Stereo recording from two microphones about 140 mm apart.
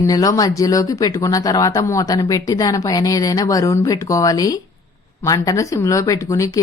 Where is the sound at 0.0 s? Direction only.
25° left (ahead or behind).